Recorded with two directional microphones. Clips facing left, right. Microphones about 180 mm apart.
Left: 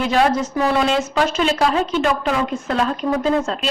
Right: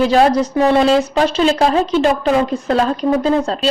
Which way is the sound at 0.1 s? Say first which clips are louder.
Right 5 dB; 35° right (ahead or behind).